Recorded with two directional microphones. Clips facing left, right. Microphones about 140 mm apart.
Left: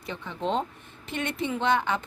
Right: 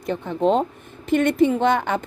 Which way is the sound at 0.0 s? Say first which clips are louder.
Right 11 dB; 45° right (ahead or behind).